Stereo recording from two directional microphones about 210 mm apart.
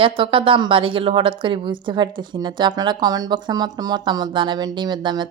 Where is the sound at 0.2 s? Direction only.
25° right (ahead or behind).